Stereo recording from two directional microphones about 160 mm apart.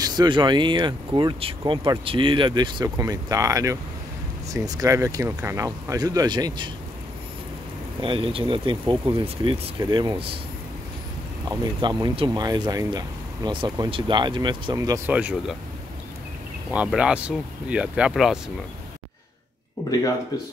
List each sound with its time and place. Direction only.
0.0 s speech: 25° right (ahead or behind)
8.0 s speech: 35° right (ahead or behind)
11.8 s speech: 25° right (ahead or behind)
15.0 s speech: 10° right (ahead or behind)
16.7 s speech: 5° right (ahead or behind)